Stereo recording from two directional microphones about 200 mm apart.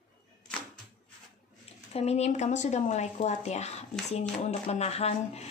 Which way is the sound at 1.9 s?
30° left (ahead or behind).